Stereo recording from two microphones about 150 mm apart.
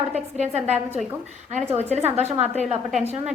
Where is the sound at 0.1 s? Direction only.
50° right (ahead or behind).